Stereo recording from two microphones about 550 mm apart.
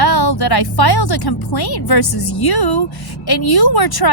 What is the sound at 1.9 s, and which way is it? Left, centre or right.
Speech, left.